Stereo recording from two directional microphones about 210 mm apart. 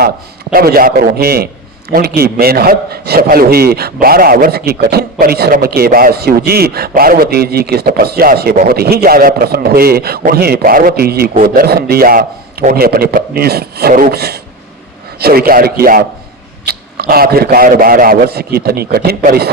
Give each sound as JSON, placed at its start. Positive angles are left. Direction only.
{"t": 0.5, "sound": "a man's voice", "side_deg": -45}